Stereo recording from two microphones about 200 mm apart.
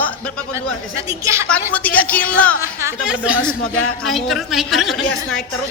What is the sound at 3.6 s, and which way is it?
A man's voice, centre (ahead or behind).